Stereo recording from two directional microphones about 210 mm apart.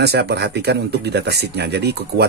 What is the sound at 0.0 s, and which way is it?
Speech, 50° right (ahead or behind).